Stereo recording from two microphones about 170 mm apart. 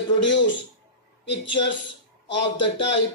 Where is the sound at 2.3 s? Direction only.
90° left.